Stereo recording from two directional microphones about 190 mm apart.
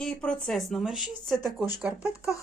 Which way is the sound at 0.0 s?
5° left (ahead or behind).